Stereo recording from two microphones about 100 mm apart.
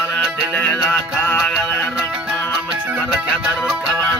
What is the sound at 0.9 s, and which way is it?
Music, 20° left (ahead or behind).